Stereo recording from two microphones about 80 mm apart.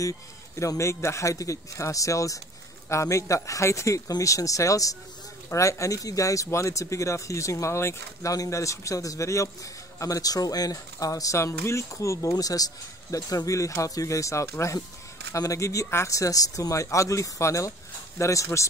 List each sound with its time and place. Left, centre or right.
0.6 s speech: left